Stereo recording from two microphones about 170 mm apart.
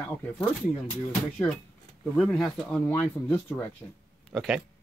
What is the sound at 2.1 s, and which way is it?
Speech, 5° left (ahead or behind).